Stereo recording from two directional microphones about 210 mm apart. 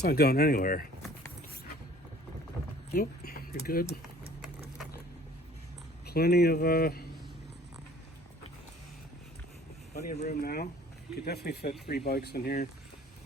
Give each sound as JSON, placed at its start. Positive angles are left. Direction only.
{"t": 0.0, "sound": "speech", "side_deg": 50}
{"t": 2.9, "sound": "speech", "side_deg": 45}
{"t": 6.1, "sound": "speech", "side_deg": 50}
{"t": 9.9, "sound": "speech", "side_deg": 45}